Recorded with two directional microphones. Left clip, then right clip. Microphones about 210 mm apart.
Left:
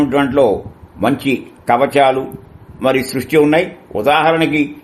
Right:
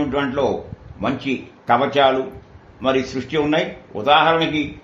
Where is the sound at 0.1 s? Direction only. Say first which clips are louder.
Left 8 dB; 55° left (ahead or behind).